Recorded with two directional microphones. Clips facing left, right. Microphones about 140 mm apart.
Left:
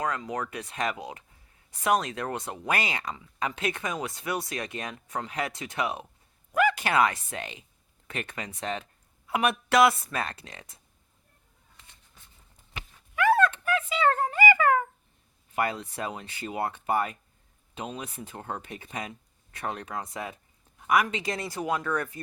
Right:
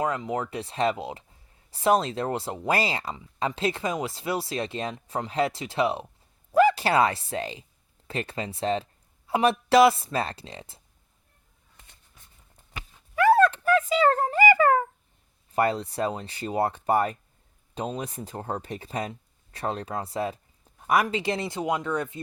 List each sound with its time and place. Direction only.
0.0 s speech: 25° right (ahead or behind)
13.1 s a sound: 35° right (ahead or behind)
15.5 s speech: 35° right (ahead or behind)